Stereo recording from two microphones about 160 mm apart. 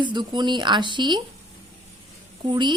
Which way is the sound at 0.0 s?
30° right (ahead or behind).